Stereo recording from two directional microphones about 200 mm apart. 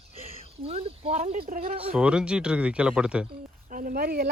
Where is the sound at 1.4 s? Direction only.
45° right (ahead or behind).